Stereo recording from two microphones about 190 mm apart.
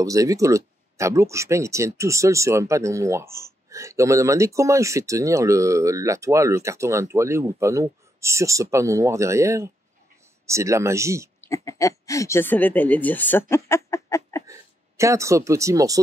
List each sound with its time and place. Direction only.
0.0 s speech: 15° right (ahead or behind)
11.4 s speech: 15° left (ahead or behind)
14.4 s speech: 15° right (ahead or behind)